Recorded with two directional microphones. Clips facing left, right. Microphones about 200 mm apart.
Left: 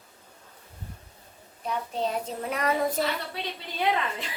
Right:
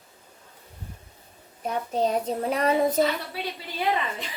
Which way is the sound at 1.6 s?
40° right (ahead or behind).